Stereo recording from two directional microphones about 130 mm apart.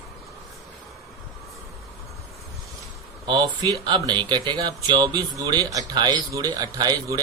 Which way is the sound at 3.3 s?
30° right (ahead or behind).